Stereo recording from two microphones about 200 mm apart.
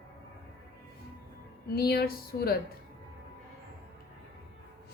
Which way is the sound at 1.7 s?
50° left (ahead or behind).